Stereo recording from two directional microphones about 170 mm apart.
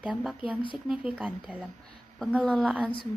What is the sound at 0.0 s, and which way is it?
A woman's voice, 5° right (ahead or behind).